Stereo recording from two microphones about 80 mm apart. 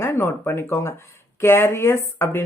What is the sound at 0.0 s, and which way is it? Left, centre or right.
Speech, left.